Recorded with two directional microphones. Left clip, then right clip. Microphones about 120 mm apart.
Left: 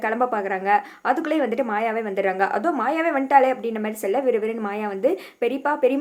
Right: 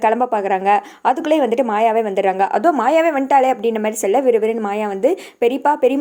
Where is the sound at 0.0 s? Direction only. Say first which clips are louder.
Right 6 dB; 55° right (ahead or behind).